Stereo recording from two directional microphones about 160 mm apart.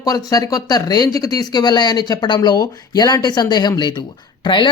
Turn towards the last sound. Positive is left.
turn(degrees=30)  # may be behind; listen again after turning